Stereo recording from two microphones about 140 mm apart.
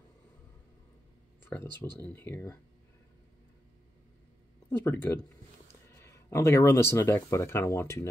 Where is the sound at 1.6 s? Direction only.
30° right (ahead or behind).